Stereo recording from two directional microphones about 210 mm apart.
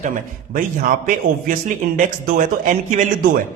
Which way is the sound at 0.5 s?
40° right (ahead or behind).